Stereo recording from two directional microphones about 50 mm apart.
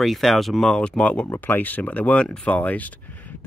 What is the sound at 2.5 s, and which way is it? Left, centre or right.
Speech, left.